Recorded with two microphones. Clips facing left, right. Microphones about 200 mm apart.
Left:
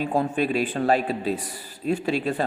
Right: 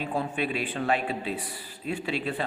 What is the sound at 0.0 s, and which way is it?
A man's voice, 45° left (ahead or behind).